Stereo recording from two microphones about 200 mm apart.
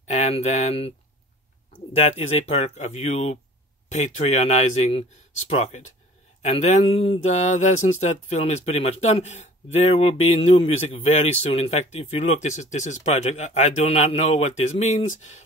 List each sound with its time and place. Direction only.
0.0 s speech: 35° left (ahead or behind)
2.0 s speech: 35° left (ahead or behind)